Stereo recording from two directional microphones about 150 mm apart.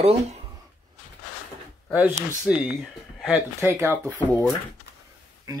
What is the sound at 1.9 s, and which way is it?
Speech, 10° right (ahead or behind).